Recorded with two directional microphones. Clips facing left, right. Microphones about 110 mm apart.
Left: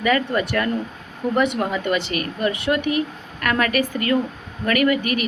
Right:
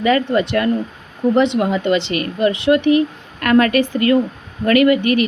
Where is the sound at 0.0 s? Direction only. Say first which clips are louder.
Right 5 dB; 30° right (ahead or behind).